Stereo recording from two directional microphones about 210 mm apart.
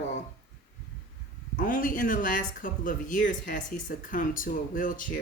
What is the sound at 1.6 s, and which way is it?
Speech, 40° left (ahead or behind).